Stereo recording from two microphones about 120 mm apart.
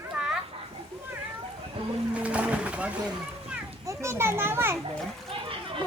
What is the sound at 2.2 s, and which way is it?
Boat, 10° right (ahead or behind).